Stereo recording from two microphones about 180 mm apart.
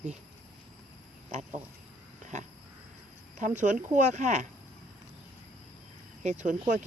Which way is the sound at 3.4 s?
45° right (ahead or behind).